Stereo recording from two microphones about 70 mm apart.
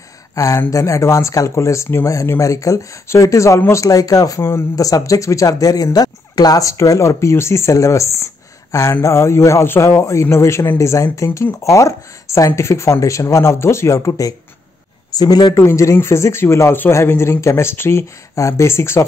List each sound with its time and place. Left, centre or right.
0.3 s speech: left
4.4 s speech: left
4.7 s speech: left
15.1 s speech: left
15.5 s speech: left